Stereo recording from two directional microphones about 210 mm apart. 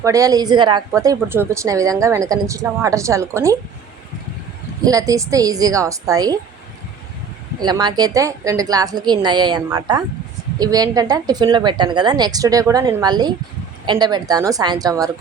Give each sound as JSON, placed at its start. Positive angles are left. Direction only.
{"t": 0.0, "sound": "speech", "side_deg": -15}
{"t": 4.8, "sound": "speech", "side_deg": -15}
{"t": 7.6, "sound": "a woman's voice", "side_deg": -20}